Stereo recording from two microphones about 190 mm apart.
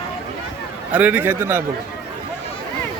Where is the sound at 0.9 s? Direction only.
10° right (ahead or behind).